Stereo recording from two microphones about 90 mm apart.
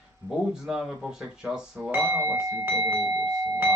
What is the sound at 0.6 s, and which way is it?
Speech, 5° right (ahead or behind).